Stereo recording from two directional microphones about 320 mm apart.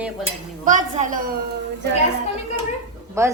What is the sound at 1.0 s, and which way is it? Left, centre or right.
Speech, right.